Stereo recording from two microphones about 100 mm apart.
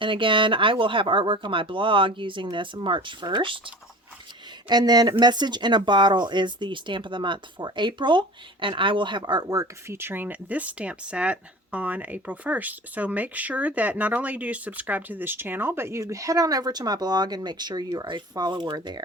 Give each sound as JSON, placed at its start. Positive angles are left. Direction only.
{"t": 0.0, "sound": "speech", "side_deg": -60}
{"t": 4.7, "sound": "speech", "side_deg": -45}